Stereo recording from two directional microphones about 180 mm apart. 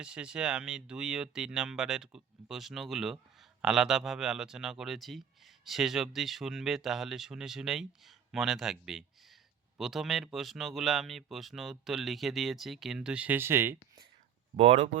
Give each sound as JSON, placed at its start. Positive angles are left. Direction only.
{"t": 0.0, "sound": "speech", "side_deg": -5}
{"t": 14.5, "sound": "speech", "side_deg": -35}